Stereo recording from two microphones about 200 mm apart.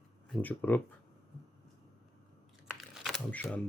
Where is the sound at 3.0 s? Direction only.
5° left (ahead or behind).